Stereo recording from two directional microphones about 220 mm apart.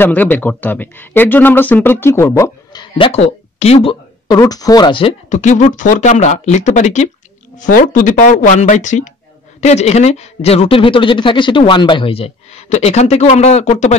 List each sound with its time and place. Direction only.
0.0 s speech: 10° left (ahead or behind); by 13.9 s 30° left (ahead or behind)